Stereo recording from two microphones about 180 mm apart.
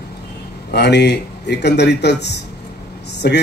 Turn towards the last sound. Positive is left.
turn(degrees=60)  # may be behind; listen again after turning